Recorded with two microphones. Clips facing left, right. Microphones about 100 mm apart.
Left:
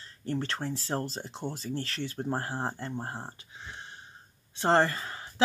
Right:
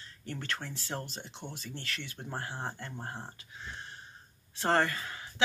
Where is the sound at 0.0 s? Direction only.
35° left (ahead or behind).